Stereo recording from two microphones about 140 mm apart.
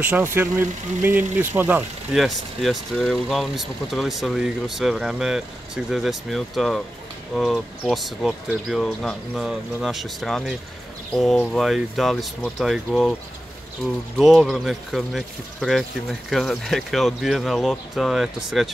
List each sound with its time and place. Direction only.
0.0 s speech: 15° right (ahead or behind)
2.1 s speech: centre (ahead or behind)
14.1 s speech: 5° right (ahead or behind)